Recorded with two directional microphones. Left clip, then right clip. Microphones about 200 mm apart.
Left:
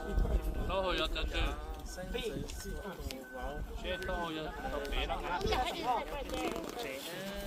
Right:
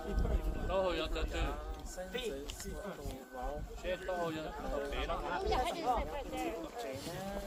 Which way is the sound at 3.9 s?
60° right (ahead or behind).